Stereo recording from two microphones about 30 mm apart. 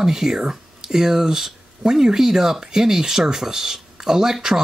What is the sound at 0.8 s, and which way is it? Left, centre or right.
Speech, centre.